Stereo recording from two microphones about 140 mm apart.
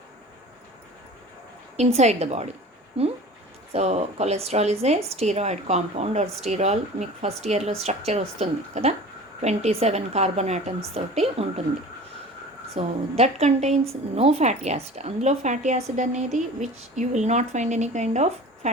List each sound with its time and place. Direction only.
1.7 s a woman's voice: 50° right (ahead or behind)
12.7 s a woman's voice: 50° right (ahead or behind)